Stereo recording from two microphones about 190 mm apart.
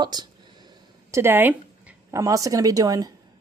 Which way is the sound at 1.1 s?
10° right (ahead or behind).